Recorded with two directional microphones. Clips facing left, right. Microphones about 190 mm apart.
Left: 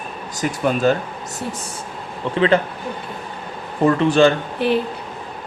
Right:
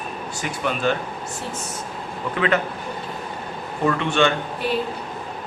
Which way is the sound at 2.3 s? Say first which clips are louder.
Left 5 dB; 30° left (ahead or behind).